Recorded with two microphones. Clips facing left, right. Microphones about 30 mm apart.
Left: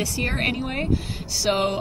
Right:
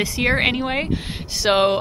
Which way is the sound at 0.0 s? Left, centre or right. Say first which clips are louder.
Right 5 dB; right.